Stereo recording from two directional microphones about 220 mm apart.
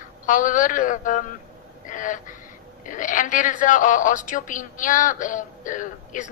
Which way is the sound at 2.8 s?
35° left (ahead or behind).